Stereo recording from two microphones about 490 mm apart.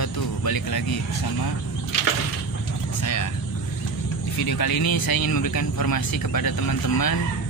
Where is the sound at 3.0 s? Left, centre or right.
Left.